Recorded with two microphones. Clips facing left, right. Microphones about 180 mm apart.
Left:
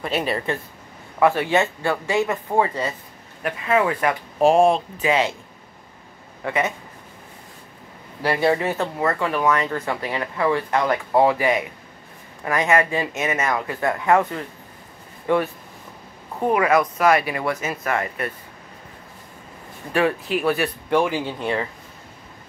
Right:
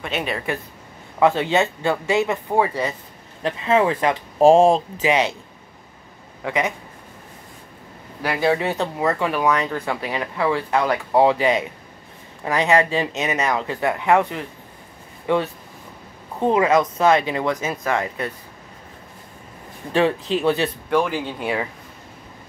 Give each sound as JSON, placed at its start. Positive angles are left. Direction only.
{"t": 0.0, "sound": "speech", "side_deg": 0}
{"t": 1.2, "sound": "speech", "side_deg": -20}
{"t": 3.4, "sound": "speech", "side_deg": -25}
{"t": 4.4, "sound": "speech", "side_deg": -35}
{"t": 5.0, "sound": "speech", "side_deg": -20}
{"t": 6.4, "sound": "speech", "side_deg": -15}
{"t": 8.2, "sound": "speech", "side_deg": 0}
{"t": 8.5, "sound": "speech", "side_deg": -20}
{"t": 19.9, "sound": "speech", "side_deg": -25}
{"t": 20.9, "sound": "speech", "side_deg": 10}
{"t": 21.4, "sound": "speech", "side_deg": -10}